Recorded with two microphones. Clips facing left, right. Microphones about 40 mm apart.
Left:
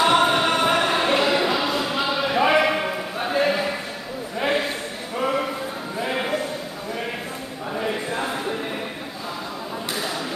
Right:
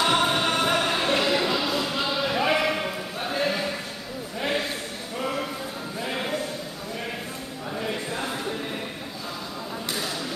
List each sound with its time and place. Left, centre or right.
0.0 s music: centre
4.4 s a sound: centre
5.9 s sheep: centre
7.7 s choir: centre